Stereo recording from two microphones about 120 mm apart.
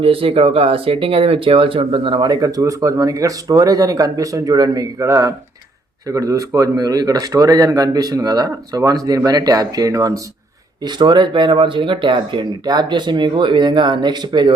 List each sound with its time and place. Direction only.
0.0 s speech: 50° right (ahead or behind); by 10.2 s 30° right (ahead or behind)
10.8 s speech: 40° right (ahead or behind)